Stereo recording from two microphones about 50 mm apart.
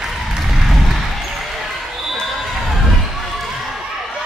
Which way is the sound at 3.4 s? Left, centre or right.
Centre.